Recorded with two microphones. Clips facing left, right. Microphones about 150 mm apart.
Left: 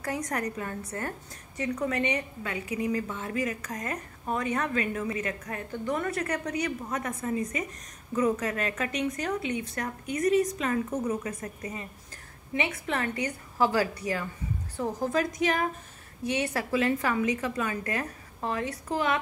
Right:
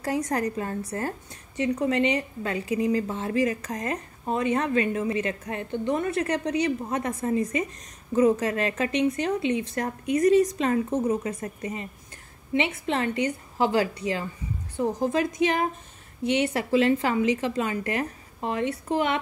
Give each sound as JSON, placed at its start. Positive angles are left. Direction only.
{"t": 0.0, "sound": "a woman's voice", "side_deg": -30}